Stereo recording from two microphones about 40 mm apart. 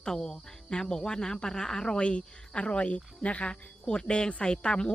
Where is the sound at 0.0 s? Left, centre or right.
Centre.